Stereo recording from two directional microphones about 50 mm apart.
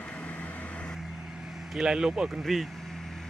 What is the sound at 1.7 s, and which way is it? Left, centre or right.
Speech, centre.